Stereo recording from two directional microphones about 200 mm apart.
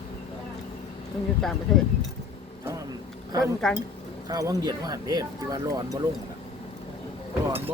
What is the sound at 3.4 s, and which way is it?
Speech, centre (ahead or behind).